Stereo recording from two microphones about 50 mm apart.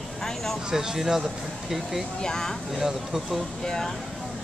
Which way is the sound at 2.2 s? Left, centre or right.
Centre.